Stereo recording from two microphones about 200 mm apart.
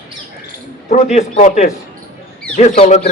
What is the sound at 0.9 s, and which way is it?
Speech, 35° left (ahead or behind).